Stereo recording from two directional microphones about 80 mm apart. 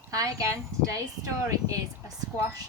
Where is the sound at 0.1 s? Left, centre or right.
Right.